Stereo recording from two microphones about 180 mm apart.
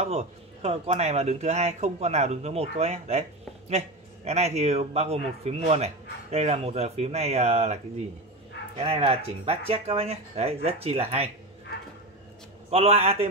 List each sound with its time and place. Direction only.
0.0 s speech: 35° right (ahead or behind)
12.6 s speech: 35° right (ahead or behind)